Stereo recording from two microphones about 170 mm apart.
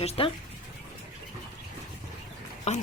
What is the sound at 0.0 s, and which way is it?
Speech, 35° left (ahead or behind).